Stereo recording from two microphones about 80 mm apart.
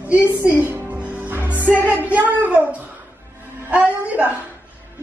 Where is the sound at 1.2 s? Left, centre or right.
Right.